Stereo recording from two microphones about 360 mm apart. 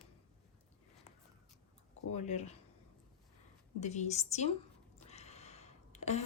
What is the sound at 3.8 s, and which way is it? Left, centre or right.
A woman's voice, centre.